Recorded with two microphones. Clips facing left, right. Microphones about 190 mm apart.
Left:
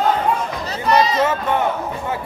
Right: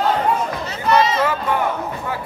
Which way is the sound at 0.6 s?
35° left (ahead or behind).